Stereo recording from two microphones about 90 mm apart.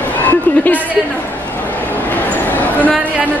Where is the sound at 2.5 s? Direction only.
15° left (ahead or behind).